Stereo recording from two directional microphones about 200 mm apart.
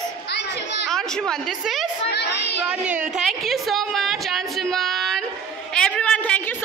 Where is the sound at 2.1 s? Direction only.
60° left (ahead or behind).